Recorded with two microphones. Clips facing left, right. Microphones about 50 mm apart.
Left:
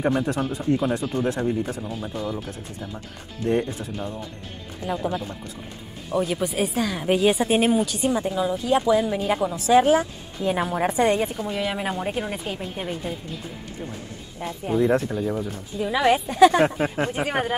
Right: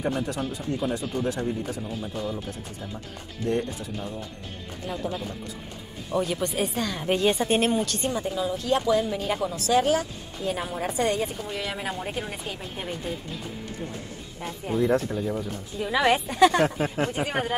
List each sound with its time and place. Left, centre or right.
0.0 s a woman's voice: left
2.3 s a woman's voice: centre
6.1 s a woman's voice: centre; by 11.2 s left
11.4 s a woman's voice: centre
14.4 s speech: centre
16.6 s a woman's voice: centre